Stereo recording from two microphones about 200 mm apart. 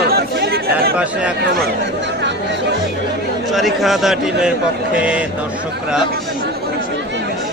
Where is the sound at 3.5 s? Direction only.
Centre (ahead or behind).